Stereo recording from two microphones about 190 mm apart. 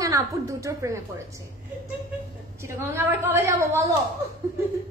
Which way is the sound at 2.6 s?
15° right (ahead or behind).